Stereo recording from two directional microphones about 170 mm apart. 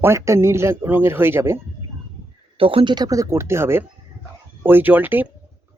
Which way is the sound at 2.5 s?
35° right (ahead or behind).